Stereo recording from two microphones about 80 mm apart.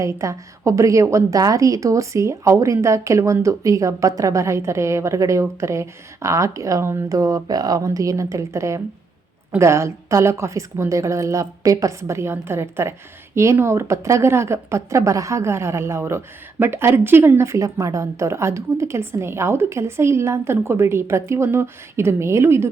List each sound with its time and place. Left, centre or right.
0.0 s speech: right